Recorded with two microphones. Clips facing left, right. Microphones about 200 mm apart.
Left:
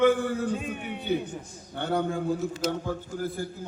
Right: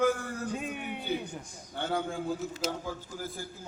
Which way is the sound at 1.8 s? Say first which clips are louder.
Left 5 dB; 60° left (ahead or behind).